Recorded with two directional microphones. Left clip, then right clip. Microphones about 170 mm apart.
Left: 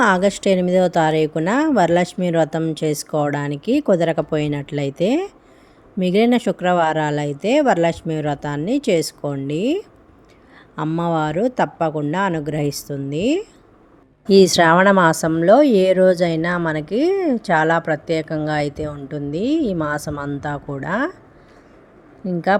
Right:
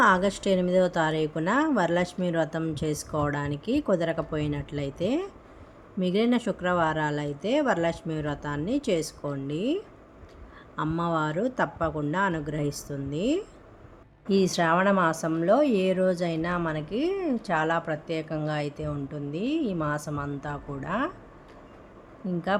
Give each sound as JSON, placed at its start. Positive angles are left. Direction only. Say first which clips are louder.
{"t": 0.0, "sound": "a woman's voice", "louder": "left 6 dB", "side_deg": 40}
{"t": 22.3, "sound": "a woman's voice", "louder": "left 11 dB", "side_deg": 40}